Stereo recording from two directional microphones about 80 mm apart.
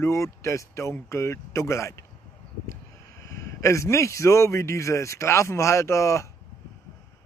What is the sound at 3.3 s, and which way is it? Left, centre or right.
Speech, left.